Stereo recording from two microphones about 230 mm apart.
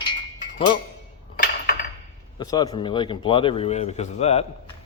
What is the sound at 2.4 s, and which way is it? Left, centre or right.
Speech, centre.